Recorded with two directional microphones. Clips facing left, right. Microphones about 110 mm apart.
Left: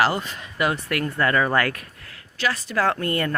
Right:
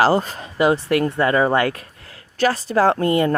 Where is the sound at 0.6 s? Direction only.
25° right (ahead or behind).